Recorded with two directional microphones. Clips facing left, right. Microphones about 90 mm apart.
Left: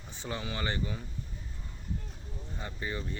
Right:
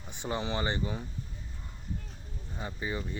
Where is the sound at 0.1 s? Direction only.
20° right (ahead or behind).